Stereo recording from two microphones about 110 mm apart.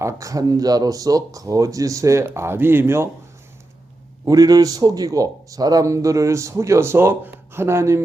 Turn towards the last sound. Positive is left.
turn(degrees=-25)  # may be behind; listen again after turning